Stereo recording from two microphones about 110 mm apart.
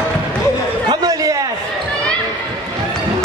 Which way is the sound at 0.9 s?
35° right (ahead or behind).